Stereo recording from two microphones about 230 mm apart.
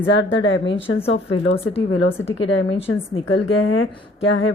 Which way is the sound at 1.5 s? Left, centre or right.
Left.